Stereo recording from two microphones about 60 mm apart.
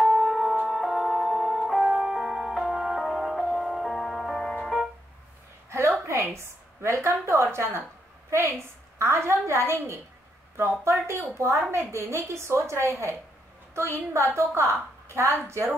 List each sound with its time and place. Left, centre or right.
0.0 s music: centre
6.0 s a sound: right
8.3 s a woman's voice: right